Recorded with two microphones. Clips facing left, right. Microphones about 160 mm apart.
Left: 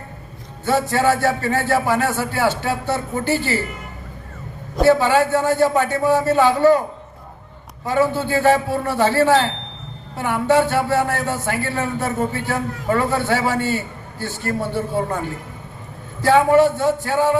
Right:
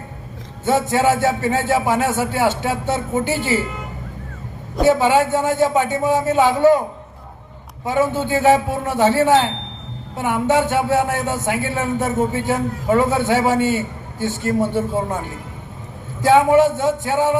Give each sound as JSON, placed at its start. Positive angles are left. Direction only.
{"t": 0.6, "sound": "speech", "side_deg": -20}
{"t": 4.9, "sound": "speech", "side_deg": -20}
{"t": 7.9, "sound": "speech", "side_deg": -20}
{"t": 16.2, "sound": "speech", "side_deg": -20}